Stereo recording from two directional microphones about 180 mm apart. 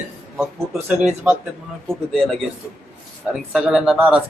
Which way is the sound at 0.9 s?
10° right (ahead or behind).